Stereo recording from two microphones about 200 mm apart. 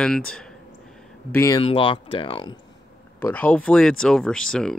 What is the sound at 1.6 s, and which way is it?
Speech, 25° left (ahead or behind).